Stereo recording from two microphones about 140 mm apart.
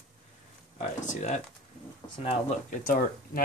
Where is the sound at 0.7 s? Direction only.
60° left (ahead or behind).